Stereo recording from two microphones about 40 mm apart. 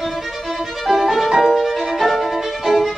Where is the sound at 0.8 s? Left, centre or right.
Centre.